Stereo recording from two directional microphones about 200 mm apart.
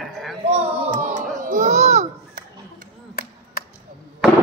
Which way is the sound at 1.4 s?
40° right (ahead or behind).